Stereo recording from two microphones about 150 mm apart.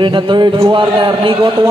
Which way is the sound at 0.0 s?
30° right (ahead or behind).